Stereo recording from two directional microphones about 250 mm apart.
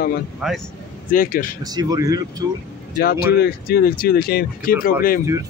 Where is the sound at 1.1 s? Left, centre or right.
Left.